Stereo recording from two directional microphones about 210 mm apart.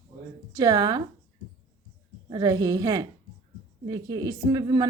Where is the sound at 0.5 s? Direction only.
20° right (ahead or behind).